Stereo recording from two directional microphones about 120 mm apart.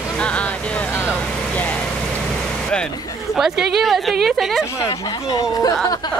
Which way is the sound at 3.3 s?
5° right (ahead or behind).